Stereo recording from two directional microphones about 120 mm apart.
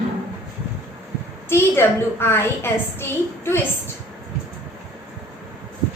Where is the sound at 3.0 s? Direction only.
20° left (ahead or behind).